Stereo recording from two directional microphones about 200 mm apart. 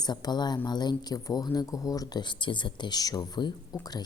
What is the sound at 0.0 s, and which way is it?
Speech, 20° left (ahead or behind).